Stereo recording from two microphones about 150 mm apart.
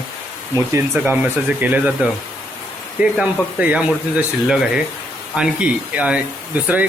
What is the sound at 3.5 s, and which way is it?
Speech, 10° right (ahead or behind).